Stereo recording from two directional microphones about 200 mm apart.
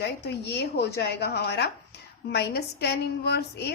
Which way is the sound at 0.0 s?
55° left (ahead or behind).